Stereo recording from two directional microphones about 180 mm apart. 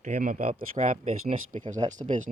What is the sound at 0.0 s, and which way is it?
Speech, 50° right (ahead or behind).